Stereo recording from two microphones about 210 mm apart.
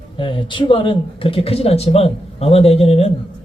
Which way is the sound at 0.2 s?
25° left (ahead or behind).